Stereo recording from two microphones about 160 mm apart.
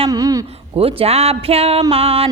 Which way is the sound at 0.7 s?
40° right (ahead or behind).